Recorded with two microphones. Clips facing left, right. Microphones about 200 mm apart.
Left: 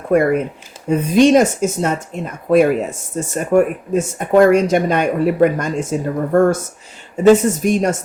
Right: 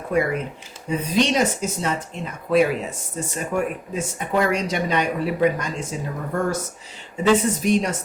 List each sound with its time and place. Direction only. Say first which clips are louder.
0.1 s speech: left 8 dB; 50° left (ahead or behind)